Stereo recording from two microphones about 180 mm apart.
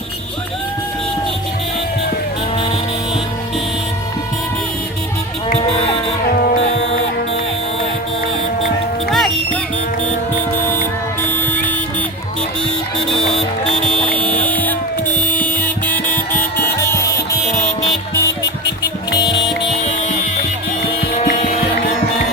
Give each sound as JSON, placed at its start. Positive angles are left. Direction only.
{"t": 6.3, "sound": "music", "side_deg": 50}
{"t": 9.0, "sound": "music", "side_deg": 0}
{"t": 11.3, "sound": "vehicle", "side_deg": 10}
{"t": 13.1, "sound": "music", "side_deg": 0}
{"t": 13.7, "sound": "buzzer", "side_deg": 5}
{"t": 21.2, "sound": "vehicle", "side_deg": 40}